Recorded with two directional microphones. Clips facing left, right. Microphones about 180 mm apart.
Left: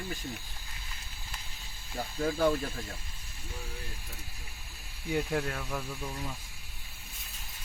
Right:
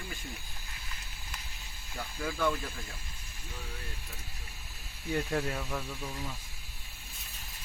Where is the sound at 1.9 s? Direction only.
40° left (ahead or behind).